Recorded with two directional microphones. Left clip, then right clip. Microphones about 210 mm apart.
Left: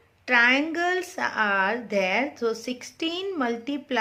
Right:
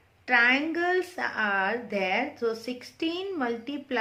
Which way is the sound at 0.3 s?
40° left (ahead or behind).